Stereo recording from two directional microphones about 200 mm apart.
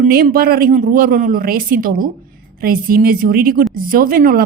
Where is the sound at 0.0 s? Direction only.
50° right (ahead or behind).